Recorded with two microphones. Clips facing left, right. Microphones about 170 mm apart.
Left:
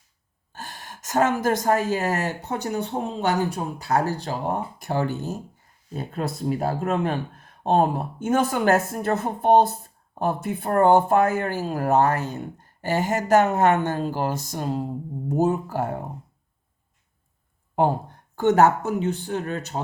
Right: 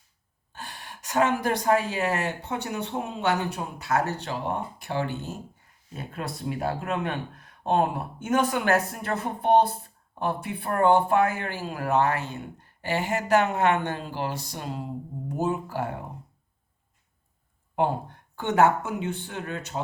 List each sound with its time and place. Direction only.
0.5 s speech: 45° left (ahead or behind)
17.7 s speech: 40° left (ahead or behind)